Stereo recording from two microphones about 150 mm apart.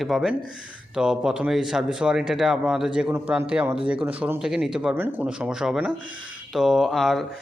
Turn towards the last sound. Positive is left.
turn(degrees=0)  # may be behind; listen again after turning